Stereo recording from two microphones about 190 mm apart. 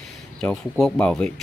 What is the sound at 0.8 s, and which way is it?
Speech, 5° left (ahead or behind).